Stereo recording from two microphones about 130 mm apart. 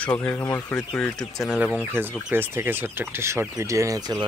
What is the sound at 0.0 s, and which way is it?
Speech, 15° left (ahead or behind).